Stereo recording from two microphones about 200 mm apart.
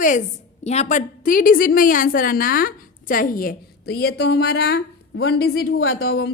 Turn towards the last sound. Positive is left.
turn(degrees=50)  # may be behind; listen again after turning